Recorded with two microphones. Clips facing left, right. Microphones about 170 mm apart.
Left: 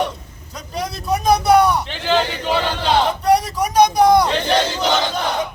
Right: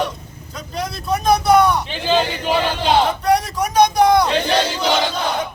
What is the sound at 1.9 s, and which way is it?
A man's voice, 15° right (ahead or behind).